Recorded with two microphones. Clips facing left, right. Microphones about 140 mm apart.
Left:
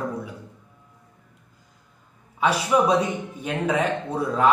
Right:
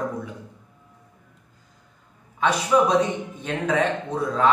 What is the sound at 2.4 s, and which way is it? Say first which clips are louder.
A man's voice: right 1 dB; 10° left (ahead or behind).